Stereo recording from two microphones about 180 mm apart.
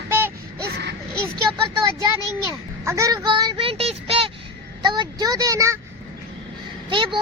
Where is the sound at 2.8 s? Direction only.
15° right (ahead or behind).